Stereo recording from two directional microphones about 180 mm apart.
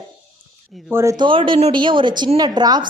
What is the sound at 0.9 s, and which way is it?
A woman's voice, 15° right (ahead or behind).